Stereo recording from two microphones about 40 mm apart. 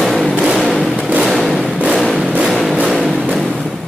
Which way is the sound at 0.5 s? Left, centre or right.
Centre.